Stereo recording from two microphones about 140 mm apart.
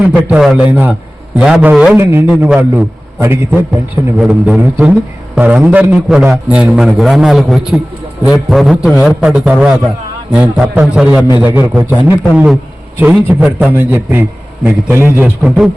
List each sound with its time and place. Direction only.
0.3 s a man's voice: 5° right (ahead or behind)
2.0 s a man's voice: 15° right (ahead or behind)
15.4 s a man's voice: 5° right (ahead or behind)